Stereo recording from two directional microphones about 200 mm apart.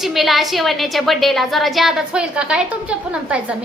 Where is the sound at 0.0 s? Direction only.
Centre (ahead or behind).